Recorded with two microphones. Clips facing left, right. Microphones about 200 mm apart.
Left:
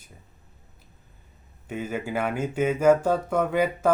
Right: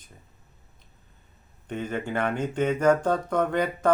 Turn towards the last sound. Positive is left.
turn(degrees=5)  # may be behind; listen again after turning